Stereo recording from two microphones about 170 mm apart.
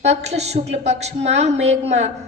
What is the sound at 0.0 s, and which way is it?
A woman's voice, 40° right (ahead or behind).